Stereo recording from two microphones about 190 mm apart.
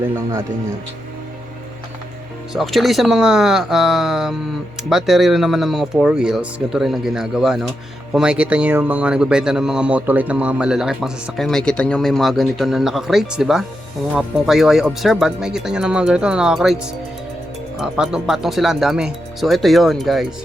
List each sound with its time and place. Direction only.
2.5 s speech: centre (ahead or behind)
17.7 s speech: 5° right (ahead or behind)